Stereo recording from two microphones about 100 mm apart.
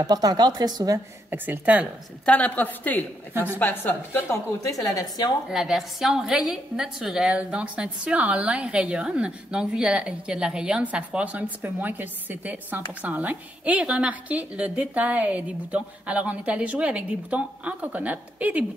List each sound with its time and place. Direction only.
0.0 s speech: 40° right (ahead or behind)
1.3 s a woman's voice: 20° right (ahead or behind)
2.2 s a woman's voice: 15° left (ahead or behind)
5.5 s a woman's voice: 5° right (ahead or behind)